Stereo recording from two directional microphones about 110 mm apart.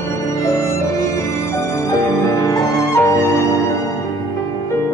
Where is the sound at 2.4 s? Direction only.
30° left (ahead or behind).